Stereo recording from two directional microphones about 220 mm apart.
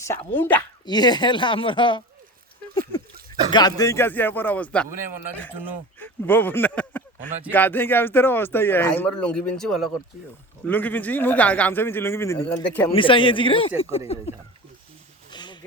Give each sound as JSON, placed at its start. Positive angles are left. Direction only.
{"t": 0.0, "sound": "speech", "side_deg": 10}
{"t": 3.5, "sound": "speech", "side_deg": 15}
{"t": 6.0, "sound": "speech", "side_deg": 10}
{"t": 12.9, "sound": "speech", "side_deg": 25}
{"t": 15.3, "sound": "a sound", "side_deg": 20}